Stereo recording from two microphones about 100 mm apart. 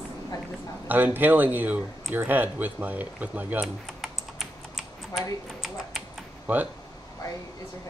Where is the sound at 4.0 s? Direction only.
5° right (ahead or behind).